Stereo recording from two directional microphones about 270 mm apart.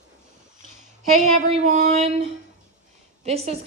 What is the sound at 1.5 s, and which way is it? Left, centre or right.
A woman's voice, right.